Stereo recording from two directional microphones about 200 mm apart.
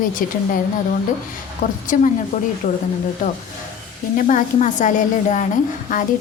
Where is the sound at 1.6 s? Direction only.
40° left (ahead or behind).